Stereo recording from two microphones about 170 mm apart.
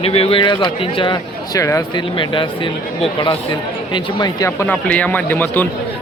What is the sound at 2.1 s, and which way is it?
Speech, 30° left (ahead or behind).